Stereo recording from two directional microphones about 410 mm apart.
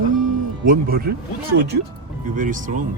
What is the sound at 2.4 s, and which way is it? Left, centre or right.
Speech, centre.